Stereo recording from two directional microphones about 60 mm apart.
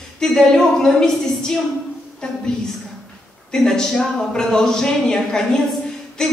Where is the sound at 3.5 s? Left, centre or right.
Centre.